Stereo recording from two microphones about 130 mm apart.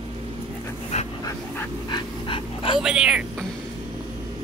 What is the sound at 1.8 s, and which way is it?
Dog, 35° left (ahead or behind).